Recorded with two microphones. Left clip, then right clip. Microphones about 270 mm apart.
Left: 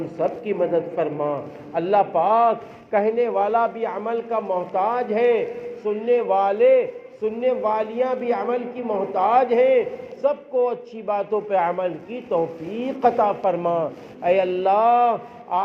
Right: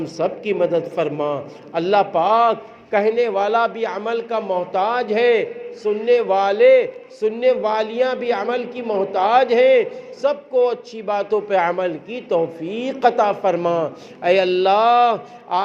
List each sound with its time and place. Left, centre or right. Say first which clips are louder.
0.2 s a man's voice: right 3 dB; right